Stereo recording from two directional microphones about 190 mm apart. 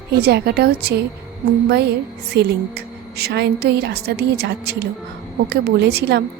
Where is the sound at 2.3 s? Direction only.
60° right (ahead or behind).